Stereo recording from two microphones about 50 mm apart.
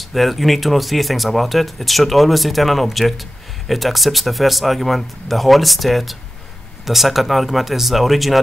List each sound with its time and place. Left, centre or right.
0.1 s speech: centre